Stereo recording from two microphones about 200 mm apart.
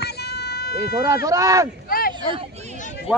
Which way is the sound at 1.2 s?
15° right (ahead or behind).